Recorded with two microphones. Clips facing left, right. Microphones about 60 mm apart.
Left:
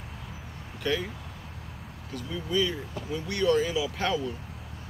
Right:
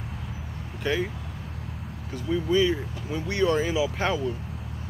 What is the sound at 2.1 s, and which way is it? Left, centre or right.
Speech, right.